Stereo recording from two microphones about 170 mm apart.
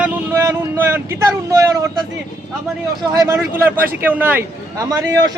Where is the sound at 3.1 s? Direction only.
20° right (ahead or behind).